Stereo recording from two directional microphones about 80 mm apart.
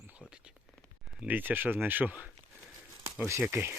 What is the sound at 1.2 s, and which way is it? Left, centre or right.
Speech, right.